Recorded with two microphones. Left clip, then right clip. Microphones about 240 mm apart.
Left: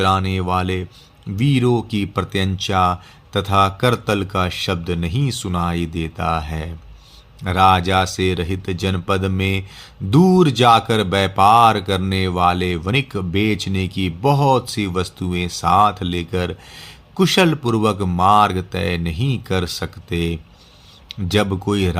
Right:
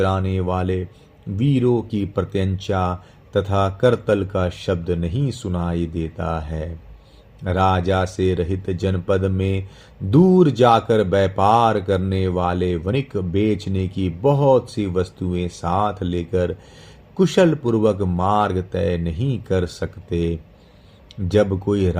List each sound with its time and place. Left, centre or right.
0.0 s speech: left